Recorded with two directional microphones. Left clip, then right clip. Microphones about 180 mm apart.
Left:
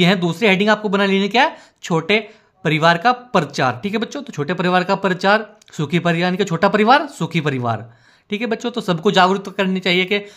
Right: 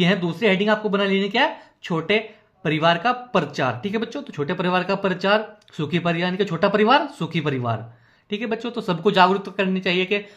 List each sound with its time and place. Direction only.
0.0 s speech: 40° left (ahead or behind)